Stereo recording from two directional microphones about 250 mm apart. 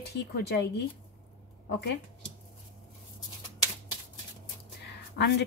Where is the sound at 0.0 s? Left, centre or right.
Left.